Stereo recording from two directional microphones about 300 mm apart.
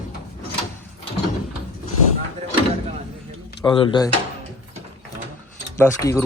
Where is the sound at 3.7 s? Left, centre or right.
Centre.